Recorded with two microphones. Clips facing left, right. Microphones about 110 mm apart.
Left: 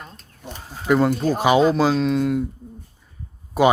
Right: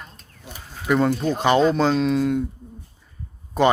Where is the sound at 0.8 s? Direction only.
5° left (ahead or behind).